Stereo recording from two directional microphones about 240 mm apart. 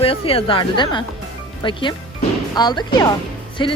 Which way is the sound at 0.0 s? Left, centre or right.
Left.